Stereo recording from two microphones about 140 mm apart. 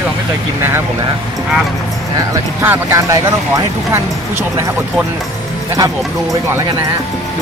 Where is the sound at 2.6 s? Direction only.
15° right (ahead or behind).